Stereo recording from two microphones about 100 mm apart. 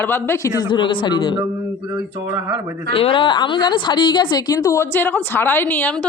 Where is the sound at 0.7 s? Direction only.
55° left (ahead or behind).